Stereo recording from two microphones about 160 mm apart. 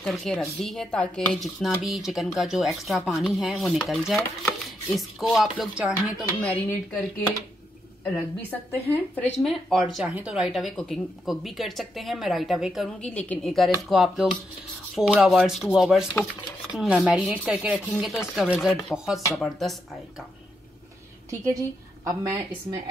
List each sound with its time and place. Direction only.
0.0 s speech: 5° left (ahead or behind)
6.4 s speech: 5° left (ahead or behind)
8.9 s speech: 10° left (ahead or behind)
21.3 s a woman's voice: 20° right (ahead or behind)